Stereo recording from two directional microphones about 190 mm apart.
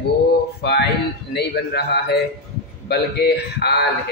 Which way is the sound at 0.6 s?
60° left (ahead or behind).